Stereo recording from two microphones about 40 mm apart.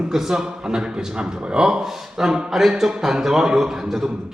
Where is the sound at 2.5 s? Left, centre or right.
Centre.